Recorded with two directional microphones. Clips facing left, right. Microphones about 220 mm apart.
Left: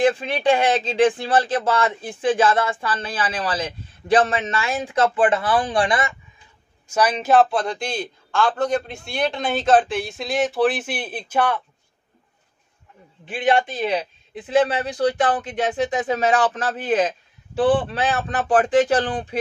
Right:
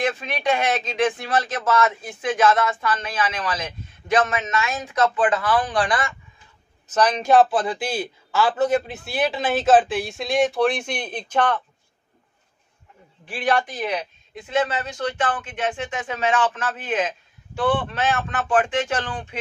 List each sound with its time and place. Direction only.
0.0 s speech: 30° left (ahead or behind)
6.9 s a man's voice: 10° left (ahead or behind)
13.3 s speech: 20° left (ahead or behind)